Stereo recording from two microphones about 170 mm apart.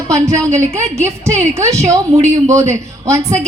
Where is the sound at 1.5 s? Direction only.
15° right (ahead or behind).